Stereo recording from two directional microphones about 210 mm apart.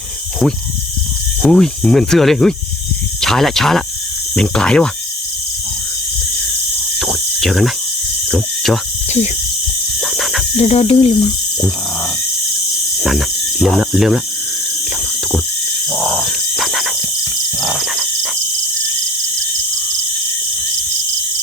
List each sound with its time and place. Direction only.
1.4 s cricket: 5° left (ahead or behind)
3.2 s speech: centre (ahead or behind)
4.4 s cricket: 5° left (ahead or behind)
7.0 s a sound: centre (ahead or behind)
8.3 s speech: centre (ahead or behind)
10.0 s a sound: centre (ahead or behind)
10.6 s speech: 30° left (ahead or behind)
13.0 s cricket: centre (ahead or behind)
15.9 s a sound: centre (ahead or behind)
17.6 s cricket: centre (ahead or behind)